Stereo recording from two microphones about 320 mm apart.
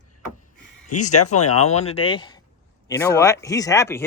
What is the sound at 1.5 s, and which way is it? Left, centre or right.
Speech, centre.